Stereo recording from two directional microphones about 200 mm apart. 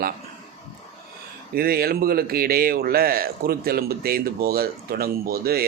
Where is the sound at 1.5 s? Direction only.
50° right (ahead or behind).